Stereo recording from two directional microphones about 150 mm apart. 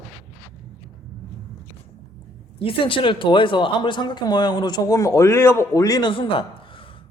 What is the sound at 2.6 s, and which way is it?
Speech, 35° left (ahead or behind).